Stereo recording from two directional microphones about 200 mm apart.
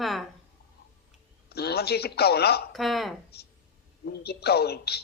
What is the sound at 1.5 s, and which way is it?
A woman's voice, 55° left (ahead or behind).